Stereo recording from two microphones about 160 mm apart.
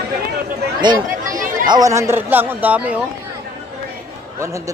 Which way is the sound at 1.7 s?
20° right (ahead or behind).